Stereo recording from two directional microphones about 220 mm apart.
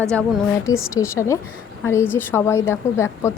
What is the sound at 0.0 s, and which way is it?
Speech, 10° right (ahead or behind).